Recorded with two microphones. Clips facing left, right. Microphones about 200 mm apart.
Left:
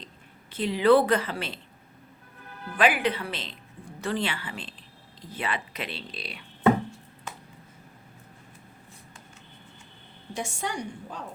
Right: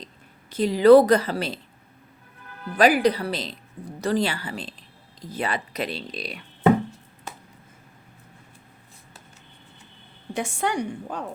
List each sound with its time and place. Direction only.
0.5 s speech: 40° right (ahead or behind)
2.7 s speech: 40° right (ahead or behind)
10.3 s a woman's voice: 60° right (ahead or behind)